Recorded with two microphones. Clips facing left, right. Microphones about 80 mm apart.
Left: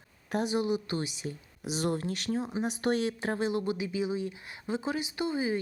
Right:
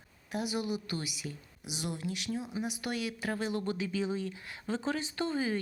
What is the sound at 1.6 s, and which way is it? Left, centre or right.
Speech, left.